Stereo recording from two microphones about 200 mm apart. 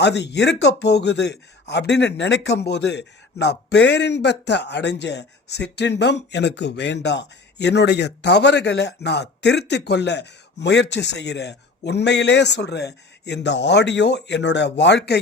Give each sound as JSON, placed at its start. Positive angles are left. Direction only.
{"t": 0.0, "sound": "a man's voice", "side_deg": 55}